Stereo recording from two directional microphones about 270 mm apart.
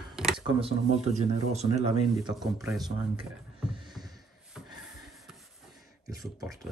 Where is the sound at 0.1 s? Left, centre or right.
Centre.